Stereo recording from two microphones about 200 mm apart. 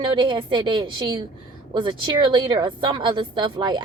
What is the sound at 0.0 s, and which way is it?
Speech, 25° right (ahead or behind).